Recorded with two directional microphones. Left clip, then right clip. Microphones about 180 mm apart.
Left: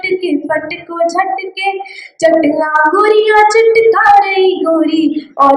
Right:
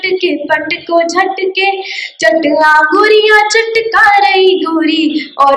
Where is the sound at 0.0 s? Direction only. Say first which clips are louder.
Right 2 dB; 45° left (ahead or behind).